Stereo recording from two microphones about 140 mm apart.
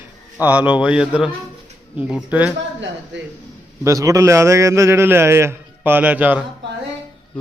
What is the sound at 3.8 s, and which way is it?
A man's voice, 25° right (ahead or behind).